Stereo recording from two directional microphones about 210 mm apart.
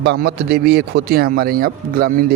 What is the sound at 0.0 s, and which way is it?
A man's voice, 50° right (ahead or behind).